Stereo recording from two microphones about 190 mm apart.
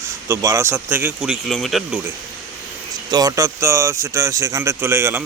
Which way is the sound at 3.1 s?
20° right (ahead or behind).